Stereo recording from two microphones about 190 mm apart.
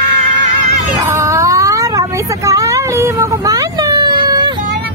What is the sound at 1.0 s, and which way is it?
Cat, 15° right (ahead or behind).